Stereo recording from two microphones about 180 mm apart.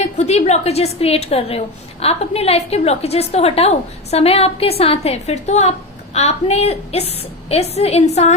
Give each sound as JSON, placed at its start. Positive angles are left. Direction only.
{"t": 0.0, "sound": "a woman's voice", "side_deg": 40}